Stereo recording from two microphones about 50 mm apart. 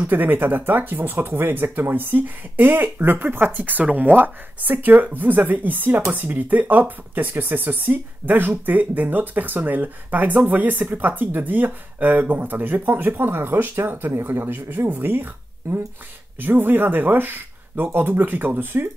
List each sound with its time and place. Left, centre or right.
0.0 s speech: right
15.7 s speech: right
16.3 s speech: right